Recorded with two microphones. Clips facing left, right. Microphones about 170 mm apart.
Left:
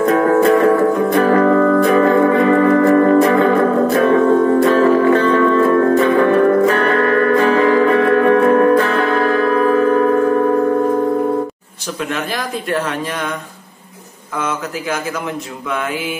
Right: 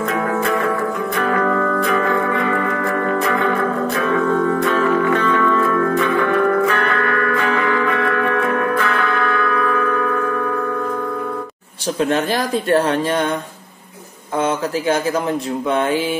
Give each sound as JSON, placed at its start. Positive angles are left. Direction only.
{"t": 0.0, "sound": "music", "side_deg": 40}
{"t": 12.0, "sound": "speech", "side_deg": -35}